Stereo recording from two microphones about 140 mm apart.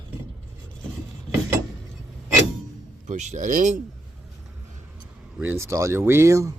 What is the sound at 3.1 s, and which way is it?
Speech, 60° right (ahead or behind).